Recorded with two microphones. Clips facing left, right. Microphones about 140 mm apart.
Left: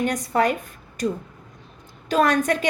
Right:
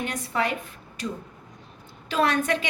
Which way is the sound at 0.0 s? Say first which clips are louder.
Left 6 dB; 45° left (ahead or behind).